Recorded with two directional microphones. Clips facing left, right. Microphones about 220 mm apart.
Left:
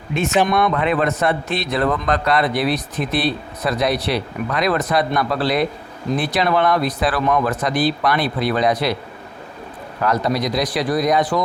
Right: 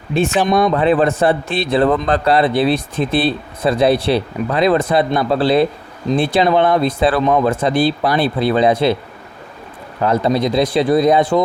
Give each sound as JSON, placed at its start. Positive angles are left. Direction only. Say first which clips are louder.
{"t": 0.1, "sound": "a man's voice", "louder": "right 3 dB", "side_deg": -30}
{"t": 10.0, "sound": "a man's voice", "louder": "right 4 dB", "side_deg": -25}